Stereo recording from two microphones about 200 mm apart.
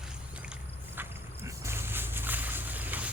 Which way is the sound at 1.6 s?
10° right (ahead or behind).